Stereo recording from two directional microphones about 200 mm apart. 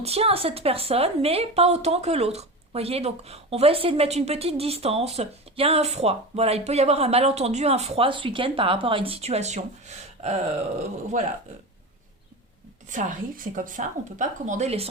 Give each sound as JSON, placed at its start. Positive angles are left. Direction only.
{"t": 0.0, "sound": "a woman's voice", "side_deg": -30}
{"t": 12.9, "sound": "a woman's voice", "side_deg": -40}